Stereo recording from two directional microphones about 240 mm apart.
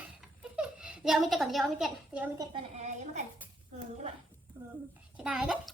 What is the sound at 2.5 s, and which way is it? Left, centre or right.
Speech, right.